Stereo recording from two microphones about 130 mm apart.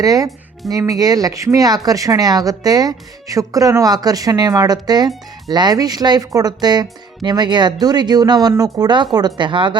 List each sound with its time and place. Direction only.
0.0 s a woman's voice: 25° right (ahead or behind)